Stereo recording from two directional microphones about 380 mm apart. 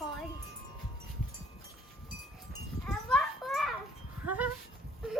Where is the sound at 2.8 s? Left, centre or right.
Centre.